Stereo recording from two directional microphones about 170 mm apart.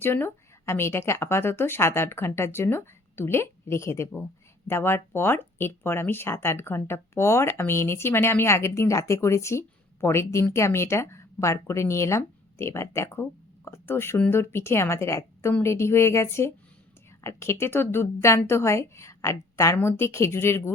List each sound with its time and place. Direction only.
0.0 s speech: 15° left (ahead or behind)